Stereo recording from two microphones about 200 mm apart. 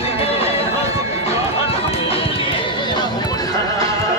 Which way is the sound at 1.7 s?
30° left (ahead or behind).